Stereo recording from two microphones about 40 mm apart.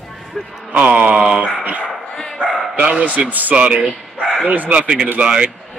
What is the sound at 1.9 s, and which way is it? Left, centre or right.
Dog, centre.